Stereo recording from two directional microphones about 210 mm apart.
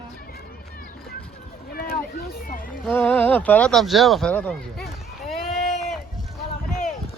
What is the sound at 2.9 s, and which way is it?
Speech, 10° left (ahead or behind).